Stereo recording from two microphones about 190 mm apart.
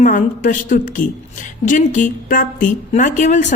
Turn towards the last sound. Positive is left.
turn(degrees=40)  # may be behind; listen again after turning